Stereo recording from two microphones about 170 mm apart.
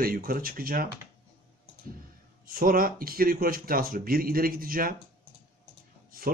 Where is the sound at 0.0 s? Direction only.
60° right (ahead or behind).